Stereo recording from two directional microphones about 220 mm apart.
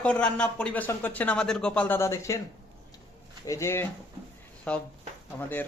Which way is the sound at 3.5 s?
10° left (ahead or behind).